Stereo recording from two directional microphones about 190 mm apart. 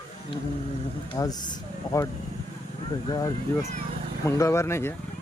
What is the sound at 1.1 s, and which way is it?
Speech, 20° left (ahead or behind).